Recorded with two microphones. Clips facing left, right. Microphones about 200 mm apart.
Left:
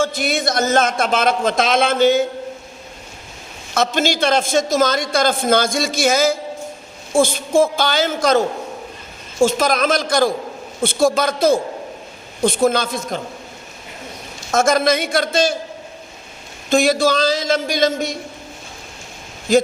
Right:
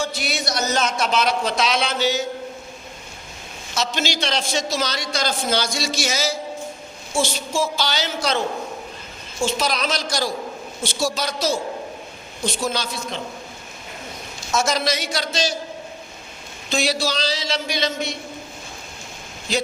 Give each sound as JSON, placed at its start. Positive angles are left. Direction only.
{"t": 0.0, "sound": "a man's voice", "side_deg": 50}
{"t": 3.8, "sound": "a man's voice", "side_deg": 50}
{"t": 14.5, "sound": "a man's voice", "side_deg": 50}
{"t": 16.6, "sound": "a man's voice", "side_deg": 50}
{"t": 19.5, "sound": "a man's voice", "side_deg": 50}